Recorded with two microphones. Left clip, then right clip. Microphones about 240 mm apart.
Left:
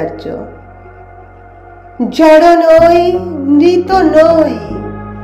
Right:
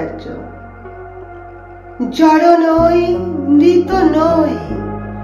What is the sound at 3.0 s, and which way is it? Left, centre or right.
Music, left.